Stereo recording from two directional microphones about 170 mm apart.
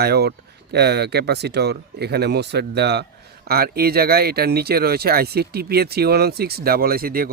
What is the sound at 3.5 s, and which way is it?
Speech, 65° right (ahead or behind).